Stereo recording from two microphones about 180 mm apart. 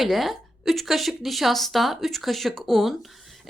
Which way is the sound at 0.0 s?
Centre (ahead or behind).